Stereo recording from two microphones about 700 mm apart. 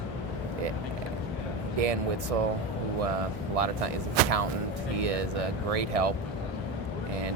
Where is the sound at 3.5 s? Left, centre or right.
Right.